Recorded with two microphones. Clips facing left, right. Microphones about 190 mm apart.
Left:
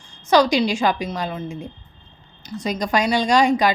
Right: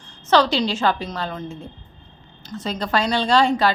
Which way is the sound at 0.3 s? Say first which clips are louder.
Left 2 dB; 10° left (ahead or behind).